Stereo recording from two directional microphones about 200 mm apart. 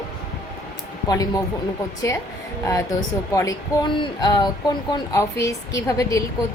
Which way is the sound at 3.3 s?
20° left (ahead or behind).